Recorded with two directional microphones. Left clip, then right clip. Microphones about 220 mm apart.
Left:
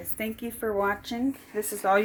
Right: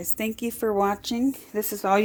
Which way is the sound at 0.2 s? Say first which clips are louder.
Right 4 dB; 50° right (ahead or behind).